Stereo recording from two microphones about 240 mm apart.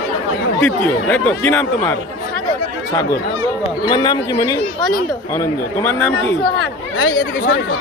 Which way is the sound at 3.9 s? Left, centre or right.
Centre.